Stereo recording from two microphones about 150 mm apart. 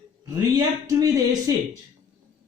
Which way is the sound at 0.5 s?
25° right (ahead or behind).